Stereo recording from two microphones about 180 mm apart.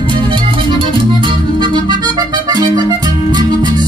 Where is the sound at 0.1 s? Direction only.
25° right (ahead or behind).